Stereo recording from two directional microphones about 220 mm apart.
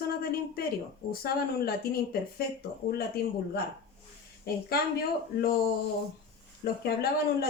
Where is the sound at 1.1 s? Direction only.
45° left (ahead or behind).